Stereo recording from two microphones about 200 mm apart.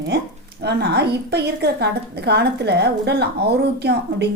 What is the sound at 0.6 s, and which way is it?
A woman's voice, 55° right (ahead or behind).